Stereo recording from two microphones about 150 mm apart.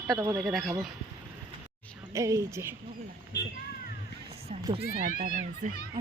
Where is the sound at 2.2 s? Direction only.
20° right (ahead or behind).